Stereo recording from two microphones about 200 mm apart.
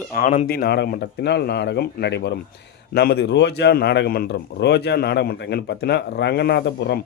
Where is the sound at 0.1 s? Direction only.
45° left (ahead or behind).